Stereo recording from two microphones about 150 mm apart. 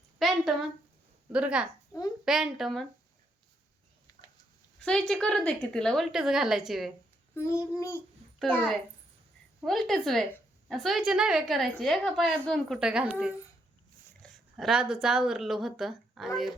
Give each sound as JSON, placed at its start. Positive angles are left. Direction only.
{"t": 0.2, "sound": "a woman's voice", "side_deg": 0}
{"t": 4.8, "sound": "a woman's voice", "side_deg": 5}
{"t": 7.3, "sound": "a child's voice", "side_deg": 20}
{"t": 8.4, "sound": "a woman's voice", "side_deg": 10}